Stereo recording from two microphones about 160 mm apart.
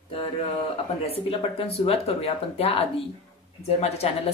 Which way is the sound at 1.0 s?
35° left (ahead or behind).